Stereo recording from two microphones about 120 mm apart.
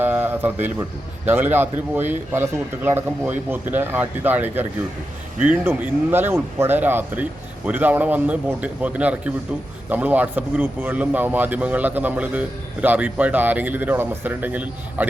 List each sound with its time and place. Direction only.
0.0 s speech: 15° right (ahead or behind)